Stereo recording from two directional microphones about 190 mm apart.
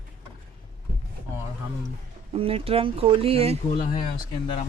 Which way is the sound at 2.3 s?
30° right (ahead or behind).